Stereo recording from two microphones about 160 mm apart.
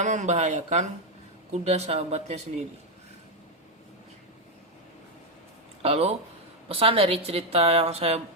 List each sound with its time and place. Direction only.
0.0 s a woman's voice: 50° right (ahead or behind)
5.8 s a woman's voice: 40° right (ahead or behind)